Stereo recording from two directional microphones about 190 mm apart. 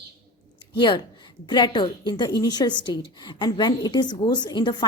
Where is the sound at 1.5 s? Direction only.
25° left (ahead or behind).